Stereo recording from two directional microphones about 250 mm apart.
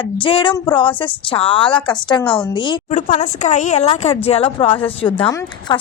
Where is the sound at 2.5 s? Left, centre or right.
Centre.